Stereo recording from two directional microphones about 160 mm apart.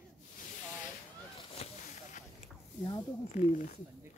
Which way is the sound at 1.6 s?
40° left (ahead or behind).